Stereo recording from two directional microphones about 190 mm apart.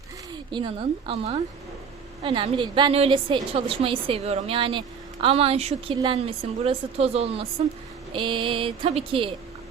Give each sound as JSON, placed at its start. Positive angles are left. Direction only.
{"t": 0.5, "sound": "a woman's voice", "side_deg": -25}